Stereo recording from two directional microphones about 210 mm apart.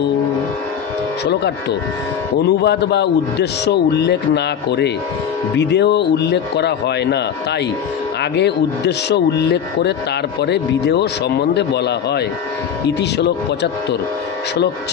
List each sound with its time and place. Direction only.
1.2 s a man's voice: 55° left (ahead or behind)